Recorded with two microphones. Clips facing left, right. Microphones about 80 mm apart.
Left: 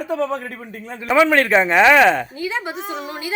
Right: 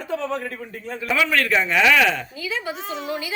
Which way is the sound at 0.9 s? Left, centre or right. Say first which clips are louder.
Left 6 dB; left.